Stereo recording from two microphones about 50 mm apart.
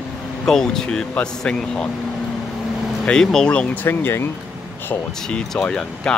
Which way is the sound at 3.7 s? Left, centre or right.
Left.